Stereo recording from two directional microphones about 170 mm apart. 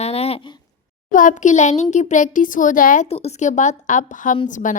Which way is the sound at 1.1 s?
50° left (ahead or behind).